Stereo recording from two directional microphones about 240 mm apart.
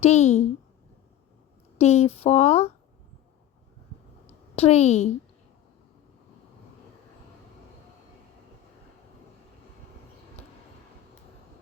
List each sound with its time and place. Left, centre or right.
0.0 s speech: left
1.8 s speech: left
4.5 s speech: left